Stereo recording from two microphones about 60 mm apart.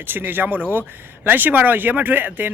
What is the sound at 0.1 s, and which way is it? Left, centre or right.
Speech, right.